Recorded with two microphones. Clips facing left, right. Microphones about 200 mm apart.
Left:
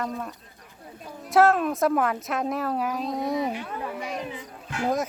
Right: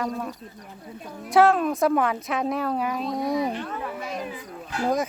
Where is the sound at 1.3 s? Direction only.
Centre (ahead or behind).